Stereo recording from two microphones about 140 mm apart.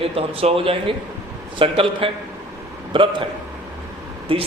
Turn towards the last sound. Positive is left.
turn(degrees=-40)  # may be behind; listen again after turning